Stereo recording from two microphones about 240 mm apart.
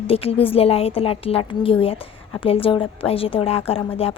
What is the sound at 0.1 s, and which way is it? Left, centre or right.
A woman's voice, left.